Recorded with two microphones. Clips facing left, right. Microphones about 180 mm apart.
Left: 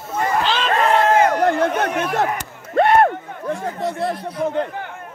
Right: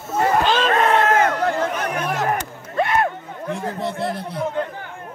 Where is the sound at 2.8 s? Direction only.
60° left (ahead or behind).